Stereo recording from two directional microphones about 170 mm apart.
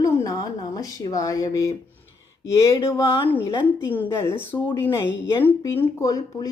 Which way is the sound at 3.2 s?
10° left (ahead or behind).